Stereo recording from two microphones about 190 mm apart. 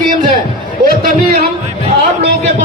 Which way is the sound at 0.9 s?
50° right (ahead or behind).